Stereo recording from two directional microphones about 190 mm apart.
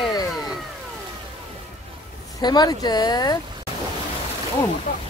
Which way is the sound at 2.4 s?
20° left (ahead or behind).